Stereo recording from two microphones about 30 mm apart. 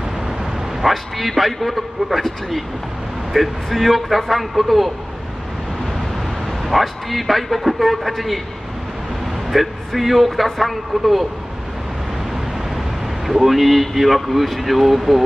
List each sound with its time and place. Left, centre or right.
0.8 s speech: centre
3.3 s speech: centre
6.8 s speech: centre
9.5 s speech: centre
13.3 s speech: centre